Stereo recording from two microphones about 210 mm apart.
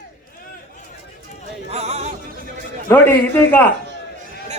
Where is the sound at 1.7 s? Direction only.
30° right (ahead or behind).